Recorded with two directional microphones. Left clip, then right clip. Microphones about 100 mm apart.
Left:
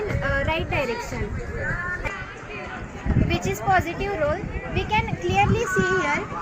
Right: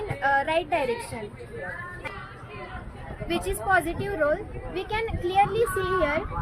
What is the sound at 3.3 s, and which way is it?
Speech, 35° right (ahead or behind).